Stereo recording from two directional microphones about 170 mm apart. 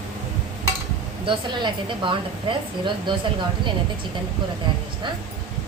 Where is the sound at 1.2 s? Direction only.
30° right (ahead or behind).